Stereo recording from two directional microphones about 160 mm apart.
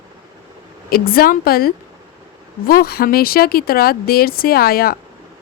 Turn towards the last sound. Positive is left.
turn(degrees=70)  # may be behind; listen again after turning